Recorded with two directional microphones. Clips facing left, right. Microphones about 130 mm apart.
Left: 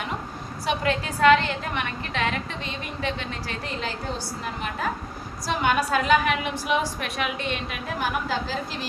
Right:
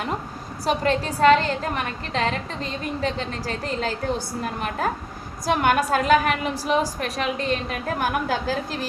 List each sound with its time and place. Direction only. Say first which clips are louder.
0.6 s a woman's voice: right 3 dB; 40° right (ahead or behind)
5.5 s a woman's voice: right 3 dB; 50° right (ahead or behind)